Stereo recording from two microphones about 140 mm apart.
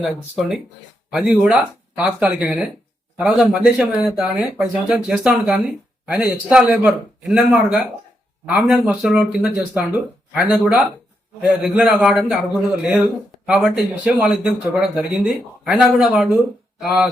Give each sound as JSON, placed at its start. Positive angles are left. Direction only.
{"t": 0.0, "sound": "a man's voice", "side_deg": -5}